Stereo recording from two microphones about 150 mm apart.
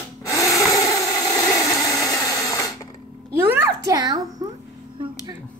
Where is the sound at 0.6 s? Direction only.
20° left (ahead or behind).